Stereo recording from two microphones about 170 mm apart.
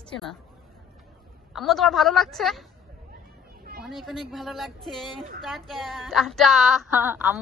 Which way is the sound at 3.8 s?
Centre (ahead or behind).